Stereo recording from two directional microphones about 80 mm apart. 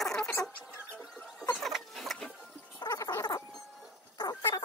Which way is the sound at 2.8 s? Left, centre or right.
Left.